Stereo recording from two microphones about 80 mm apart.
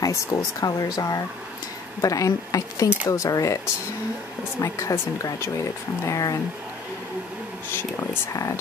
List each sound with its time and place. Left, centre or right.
0.0 s speech: left
4.6 s speech: left
8.3 s speech: left